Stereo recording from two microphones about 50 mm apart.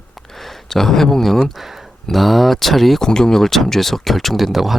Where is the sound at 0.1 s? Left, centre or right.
Centre.